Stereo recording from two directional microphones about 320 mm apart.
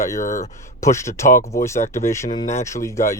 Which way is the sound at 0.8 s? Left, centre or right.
Centre.